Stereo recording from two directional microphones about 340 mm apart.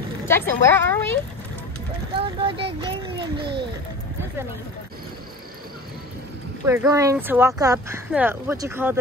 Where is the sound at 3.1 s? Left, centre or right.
Right.